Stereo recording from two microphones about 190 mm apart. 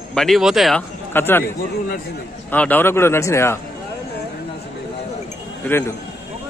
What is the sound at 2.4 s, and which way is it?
A man's voice, 10° left (ahead or behind).